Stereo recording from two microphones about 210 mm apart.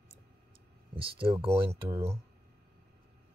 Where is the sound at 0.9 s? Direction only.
25° right (ahead or behind).